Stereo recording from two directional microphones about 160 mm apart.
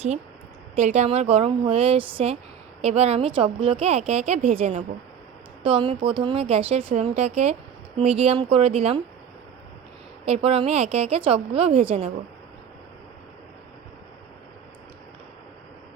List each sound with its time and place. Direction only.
0.8 s speech: 45° right (ahead or behind)
5.6 s speech: 35° right (ahead or behind)
10.2 s speech: 40° right (ahead or behind)